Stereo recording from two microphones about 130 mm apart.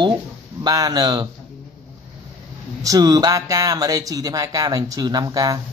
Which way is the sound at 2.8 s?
30° right (ahead or behind).